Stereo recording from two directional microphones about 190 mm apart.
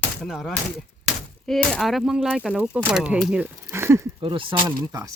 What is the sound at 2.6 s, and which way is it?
Speech, 5° right (ahead or behind).